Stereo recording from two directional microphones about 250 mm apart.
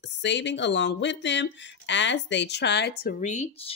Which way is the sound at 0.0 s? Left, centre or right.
Left.